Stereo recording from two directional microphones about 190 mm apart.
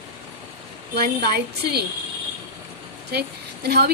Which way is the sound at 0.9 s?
55° right (ahead or behind).